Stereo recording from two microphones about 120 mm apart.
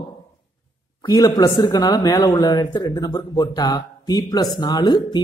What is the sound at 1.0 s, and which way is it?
Speech, 30° left (ahead or behind).